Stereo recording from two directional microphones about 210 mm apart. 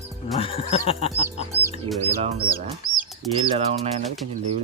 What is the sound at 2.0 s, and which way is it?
Speech, 30° right (ahead or behind).